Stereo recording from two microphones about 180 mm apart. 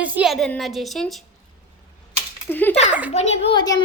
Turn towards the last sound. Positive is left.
turn(degrees=25)  # may be behind; listen again after turning